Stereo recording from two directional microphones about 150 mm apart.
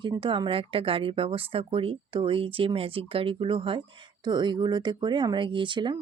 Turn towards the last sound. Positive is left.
turn(degrees=-30)  # may be behind; listen again after turning